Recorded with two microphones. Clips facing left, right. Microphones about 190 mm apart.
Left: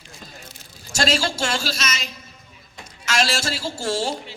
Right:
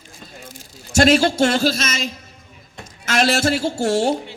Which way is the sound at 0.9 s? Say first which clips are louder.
Right 9 dB; 55° right (ahead or behind).